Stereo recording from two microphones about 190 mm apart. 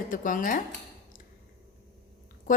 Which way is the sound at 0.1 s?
45° left (ahead or behind).